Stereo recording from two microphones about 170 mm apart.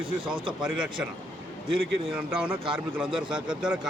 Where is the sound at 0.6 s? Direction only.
5° right (ahead or behind).